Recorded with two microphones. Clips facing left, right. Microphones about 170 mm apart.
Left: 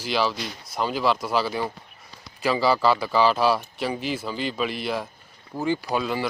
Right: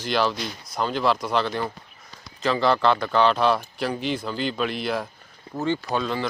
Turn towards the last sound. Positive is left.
turn(degrees=10)  # may be behind; listen again after turning